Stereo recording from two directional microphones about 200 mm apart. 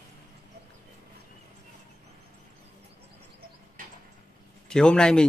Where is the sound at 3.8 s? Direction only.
45° right (ahead or behind).